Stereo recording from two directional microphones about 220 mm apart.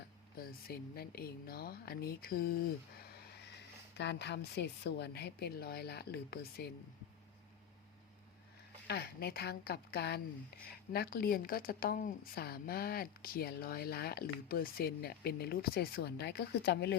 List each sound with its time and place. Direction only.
0.3 s a woman's voice: 45° left (ahead or behind)
3.0 s a sound: 45° left (ahead or behind)
3.9 s a woman's voice: 50° left (ahead or behind)
8.9 s a woman's voice: 45° left (ahead or behind)